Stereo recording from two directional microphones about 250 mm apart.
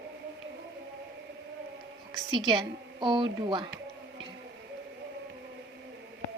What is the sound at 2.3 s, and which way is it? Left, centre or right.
Speech, centre.